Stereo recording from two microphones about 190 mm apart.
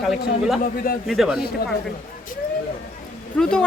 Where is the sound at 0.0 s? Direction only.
Centre (ahead or behind).